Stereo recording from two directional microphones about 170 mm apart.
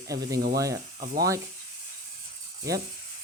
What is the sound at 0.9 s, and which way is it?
Speech, 55° right (ahead or behind).